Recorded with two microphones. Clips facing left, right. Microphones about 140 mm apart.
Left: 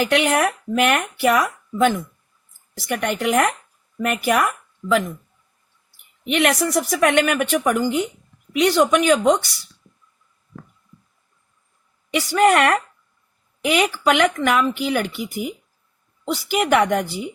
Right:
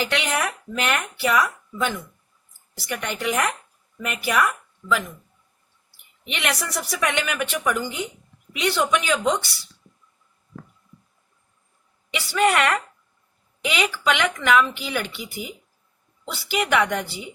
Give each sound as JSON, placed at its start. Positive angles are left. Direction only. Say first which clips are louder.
{"t": 0.0, "sound": "speech", "louder": "left 7 dB", "side_deg": 50}
{"t": 6.2, "sound": "speech", "louder": "left 9 dB", "side_deg": 50}
{"t": 12.1, "sound": "speech", "louder": "left 5 dB", "side_deg": 45}